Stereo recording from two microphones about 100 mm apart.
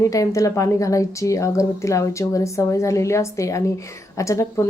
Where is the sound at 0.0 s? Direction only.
35° left (ahead or behind).